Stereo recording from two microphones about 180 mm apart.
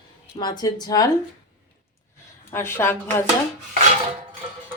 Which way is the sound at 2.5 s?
15° left (ahead or behind).